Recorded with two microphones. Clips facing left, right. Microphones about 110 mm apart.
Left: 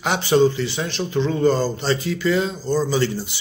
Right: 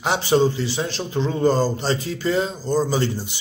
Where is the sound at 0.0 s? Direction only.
30° right (ahead or behind).